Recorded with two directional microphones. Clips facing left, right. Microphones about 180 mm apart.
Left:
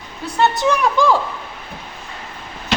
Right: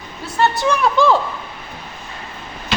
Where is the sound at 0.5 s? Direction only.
15° left (ahead or behind).